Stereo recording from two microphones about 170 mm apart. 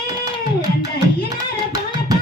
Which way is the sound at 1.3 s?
20° right (ahead or behind).